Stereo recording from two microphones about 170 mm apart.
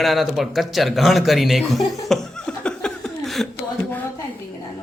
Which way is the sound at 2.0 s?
Centre (ahead or behind).